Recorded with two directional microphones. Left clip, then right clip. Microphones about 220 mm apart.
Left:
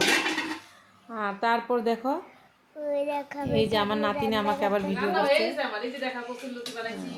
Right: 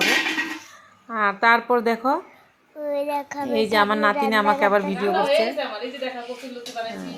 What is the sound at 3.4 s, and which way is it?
A woman's voice, 15° right (ahead or behind).